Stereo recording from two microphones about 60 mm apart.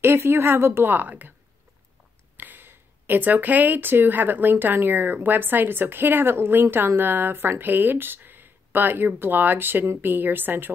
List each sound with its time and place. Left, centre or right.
0.0 s speech: right
2.3 s speech: right